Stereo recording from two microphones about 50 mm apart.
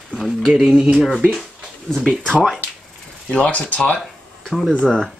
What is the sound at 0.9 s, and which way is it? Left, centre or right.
Speech, centre.